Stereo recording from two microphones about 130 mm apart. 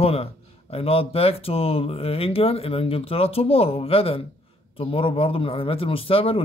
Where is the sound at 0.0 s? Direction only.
50° left (ahead or behind).